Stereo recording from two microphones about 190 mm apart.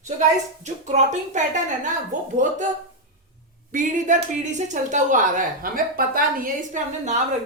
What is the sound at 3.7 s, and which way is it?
A woman's voice, 40° right (ahead or behind).